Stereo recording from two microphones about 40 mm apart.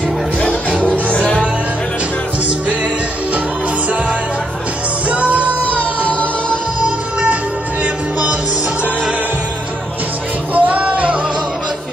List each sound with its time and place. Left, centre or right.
0.4 s music: left
5.1 s music: right
7.8 s music: right
10.5 s music: right